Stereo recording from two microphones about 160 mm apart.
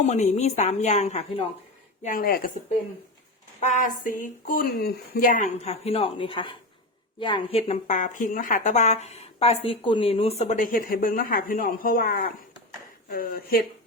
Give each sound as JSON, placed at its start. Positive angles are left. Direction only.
{"t": 0.0, "sound": "speech", "side_deg": 45}
{"t": 2.0, "sound": "speech", "side_deg": 65}
{"t": 3.6, "sound": "speech", "side_deg": 50}